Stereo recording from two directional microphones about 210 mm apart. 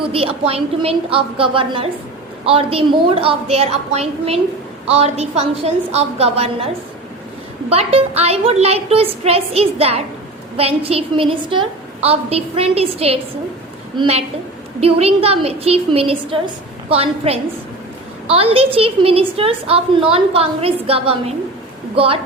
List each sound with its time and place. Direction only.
0.0 s a woman's voice: 25° right (ahead or behind)
7.7 s a woman's voice: 30° right (ahead or behind)